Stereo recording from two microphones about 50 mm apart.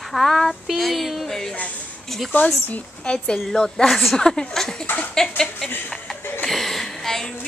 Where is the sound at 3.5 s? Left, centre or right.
Centre.